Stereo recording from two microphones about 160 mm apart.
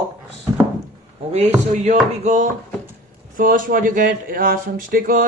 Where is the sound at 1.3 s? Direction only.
45° right (ahead or behind).